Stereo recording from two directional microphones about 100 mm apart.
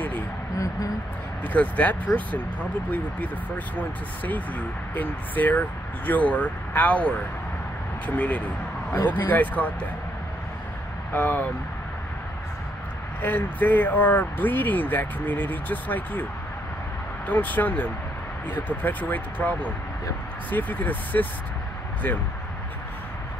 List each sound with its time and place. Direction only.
0.6 s a sound: 35° left (ahead or behind)
1.4 s speech: 15° left (ahead or behind)
4.9 s speech: 15° left (ahead or behind)
8.2 s speech: 15° left (ahead or behind)
11.1 s speech: 20° left (ahead or behind)
13.2 s speech: 15° left (ahead or behind)
17.3 s speech: 15° left (ahead or behind)